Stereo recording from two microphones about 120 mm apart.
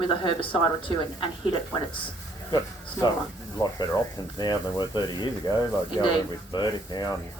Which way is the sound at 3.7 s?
35° left (ahead or behind).